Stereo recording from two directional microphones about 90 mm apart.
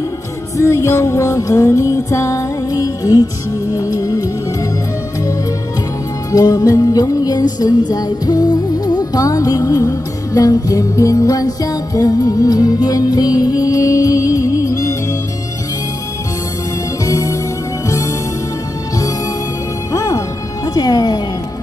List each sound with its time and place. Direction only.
0.6 s music: 35° left (ahead or behind)
6.3 s music: 45° left (ahead or behind)
17.0 s music: 35° left (ahead or behind)
19.9 s music: 40° left (ahead or behind)
20.7 s speech: 45° left (ahead or behind)